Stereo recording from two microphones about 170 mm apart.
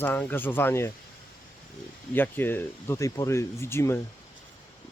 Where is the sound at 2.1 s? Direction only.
10° left (ahead or behind).